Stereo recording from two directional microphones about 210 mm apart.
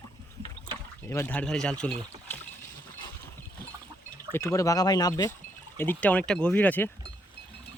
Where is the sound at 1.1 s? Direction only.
10° left (ahead or behind).